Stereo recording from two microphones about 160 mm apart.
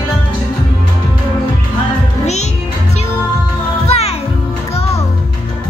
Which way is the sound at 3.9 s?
40° left (ahead or behind).